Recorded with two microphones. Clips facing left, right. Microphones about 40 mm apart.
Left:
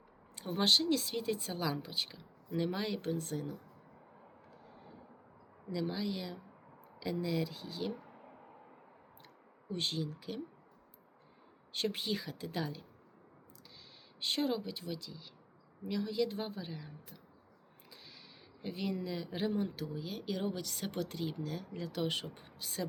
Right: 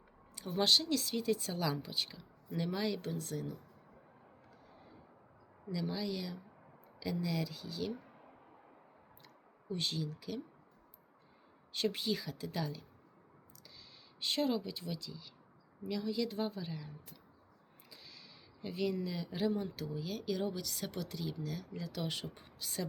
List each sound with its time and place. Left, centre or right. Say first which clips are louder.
0.3 s speech: left 1 dB; left
5.7 s speech: left 1 dB; centre
9.2 s speech: right 1 dB; left
11.8 s speech: right 1 dB; left
14.3 s a woman's voice: even; centre